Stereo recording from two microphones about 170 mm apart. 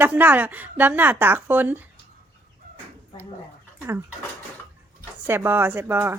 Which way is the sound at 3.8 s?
15° right (ahead or behind).